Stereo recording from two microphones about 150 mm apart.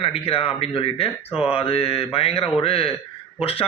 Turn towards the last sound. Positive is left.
turn(degrees=40)  # may be behind; listen again after turning